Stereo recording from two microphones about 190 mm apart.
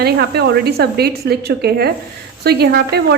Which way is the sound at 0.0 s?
55° right (ahead or behind).